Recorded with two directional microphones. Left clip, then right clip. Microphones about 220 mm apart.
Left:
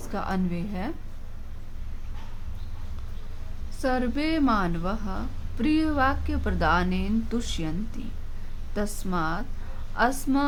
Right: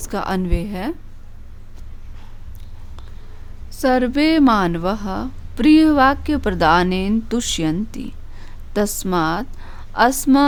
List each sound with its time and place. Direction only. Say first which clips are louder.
0.0 s a woman's voice: right 8 dB; 50° right (ahead or behind)
3.7 s a woman's voice: right 10 dB; 45° right (ahead or behind)